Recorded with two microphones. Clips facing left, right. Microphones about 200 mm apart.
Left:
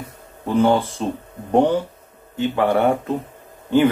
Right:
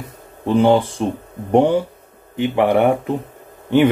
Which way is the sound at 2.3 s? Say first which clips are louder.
Right 3 dB; 15° right (ahead or behind).